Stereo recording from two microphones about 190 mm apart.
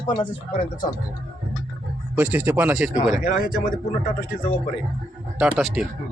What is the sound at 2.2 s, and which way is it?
Speech, 10° right (ahead or behind).